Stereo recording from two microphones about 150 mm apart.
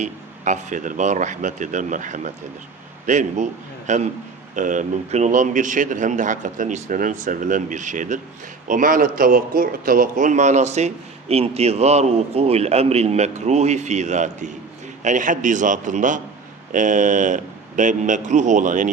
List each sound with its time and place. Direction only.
0.0 s a man's voice: 55° right (ahead or behind)